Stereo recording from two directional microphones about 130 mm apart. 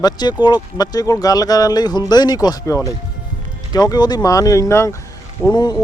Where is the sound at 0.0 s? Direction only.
30° left (ahead or behind).